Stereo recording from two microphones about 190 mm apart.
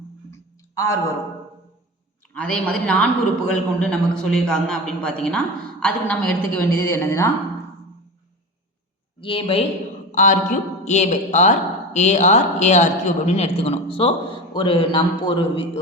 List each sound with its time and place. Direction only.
0.7 s speech: 15° left (ahead or behind)
2.3 s a man's voice: 5° left (ahead or behind)
9.2 s a man's voice: 30° left (ahead or behind)
10.1 s a sound: 40° left (ahead or behind)
10.5 s a man's voice: 35° left (ahead or behind)